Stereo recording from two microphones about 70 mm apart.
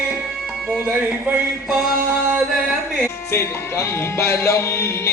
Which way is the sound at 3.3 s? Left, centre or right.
Left.